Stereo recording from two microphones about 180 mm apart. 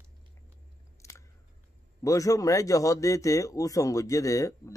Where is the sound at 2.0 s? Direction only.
20° left (ahead or behind).